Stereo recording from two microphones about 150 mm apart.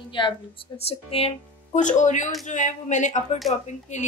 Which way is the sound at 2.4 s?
55° left (ahead or behind).